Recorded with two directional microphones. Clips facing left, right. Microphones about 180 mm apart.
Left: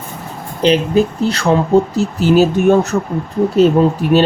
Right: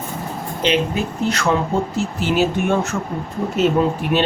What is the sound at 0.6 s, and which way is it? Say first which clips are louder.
Speech: left 7 dB; 35° left (ahead or behind).